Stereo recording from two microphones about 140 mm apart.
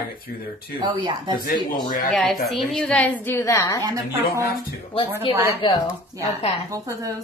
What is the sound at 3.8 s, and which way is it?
Speech, 20° right (ahead or behind).